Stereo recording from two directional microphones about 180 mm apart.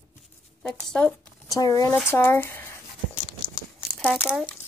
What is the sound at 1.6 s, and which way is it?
Speech, 20° left (ahead or behind).